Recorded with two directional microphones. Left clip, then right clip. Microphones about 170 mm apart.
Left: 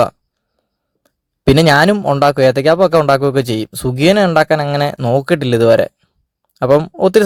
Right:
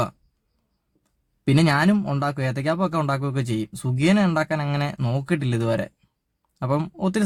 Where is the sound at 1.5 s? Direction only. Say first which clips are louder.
Left 11 dB; 40° left (ahead or behind).